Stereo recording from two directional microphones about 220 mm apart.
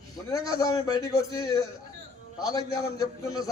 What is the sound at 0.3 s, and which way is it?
A man's voice, 15° left (ahead or behind).